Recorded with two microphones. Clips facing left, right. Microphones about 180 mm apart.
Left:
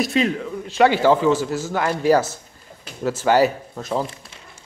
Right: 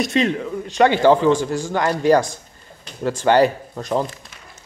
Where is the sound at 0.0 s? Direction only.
Centre (ahead or behind).